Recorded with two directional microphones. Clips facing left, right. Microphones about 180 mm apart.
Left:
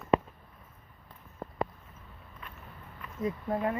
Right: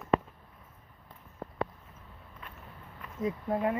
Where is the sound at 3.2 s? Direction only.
20° right (ahead or behind).